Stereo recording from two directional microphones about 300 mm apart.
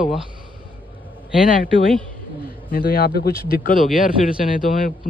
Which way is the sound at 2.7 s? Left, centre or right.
Left.